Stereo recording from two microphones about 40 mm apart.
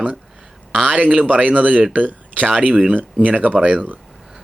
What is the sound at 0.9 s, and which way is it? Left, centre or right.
Speech, right.